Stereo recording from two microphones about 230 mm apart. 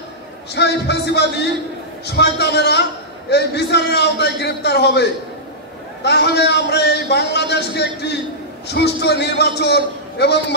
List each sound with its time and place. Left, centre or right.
0.6 s a man's voice: left